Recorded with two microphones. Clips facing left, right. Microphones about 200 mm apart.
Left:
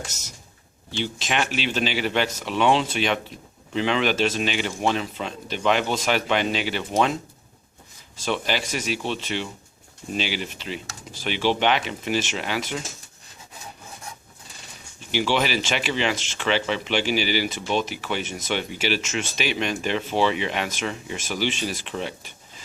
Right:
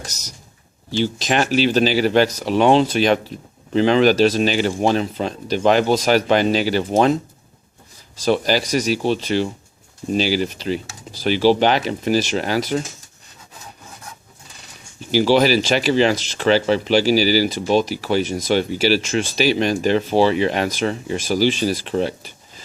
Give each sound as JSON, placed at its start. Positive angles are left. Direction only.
{"t": 0.0, "sound": "speech", "side_deg": -40}
{"t": 8.2, "sound": "speech", "side_deg": -40}
{"t": 15.1, "sound": "speech", "side_deg": -35}